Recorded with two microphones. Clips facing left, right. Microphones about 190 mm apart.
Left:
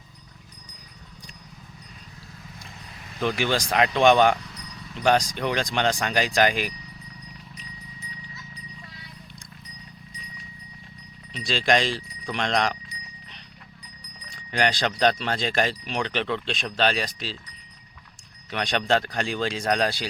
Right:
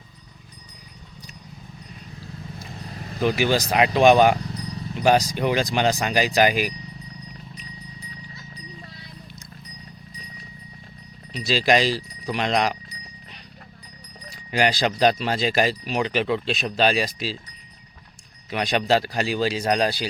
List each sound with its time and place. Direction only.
2.6 s vehicle: 35° right (ahead or behind)
3.2 s speech: 5° right (ahead or behind)
4.4 s a sound: 35° right (ahead or behind)
4.9 s speech: 5° right (ahead or behind)
11.4 s speech: 5° right (ahead or behind)
14.3 s speech: 10° right (ahead or behind)
18.5 s speech: 5° right (ahead or behind)